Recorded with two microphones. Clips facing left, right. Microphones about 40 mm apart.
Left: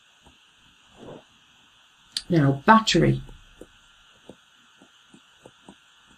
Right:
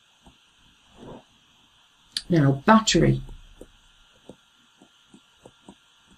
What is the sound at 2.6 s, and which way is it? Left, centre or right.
Speech, centre.